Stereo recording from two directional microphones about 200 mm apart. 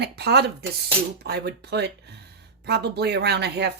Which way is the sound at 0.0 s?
55° right (ahead or behind).